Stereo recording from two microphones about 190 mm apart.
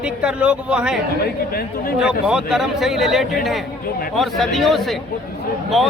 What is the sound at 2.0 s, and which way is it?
A man's voice, 5° right (ahead or behind).